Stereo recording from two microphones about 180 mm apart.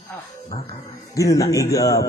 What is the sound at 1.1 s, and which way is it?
Speech, 20° left (ahead or behind).